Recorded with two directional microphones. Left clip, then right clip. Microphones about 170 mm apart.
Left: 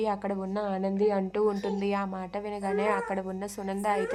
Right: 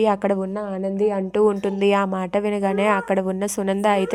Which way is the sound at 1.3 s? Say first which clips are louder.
Right 9 dB; 35° right (ahead or behind).